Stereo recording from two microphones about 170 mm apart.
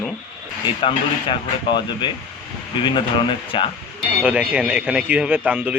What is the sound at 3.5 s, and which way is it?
Speech, 30° left (ahead or behind).